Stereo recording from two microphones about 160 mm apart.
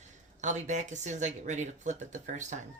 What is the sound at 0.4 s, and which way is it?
Speech, 50° right (ahead or behind).